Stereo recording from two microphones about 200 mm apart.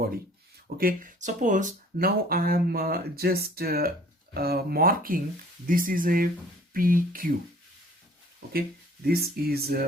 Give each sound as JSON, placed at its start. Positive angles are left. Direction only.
{"t": 0.8, "sound": "speech", "side_deg": -45}
{"t": 9.0, "sound": "speech", "side_deg": -50}